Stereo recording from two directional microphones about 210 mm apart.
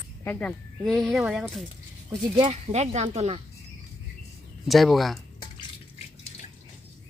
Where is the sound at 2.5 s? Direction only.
30° right (ahead or behind).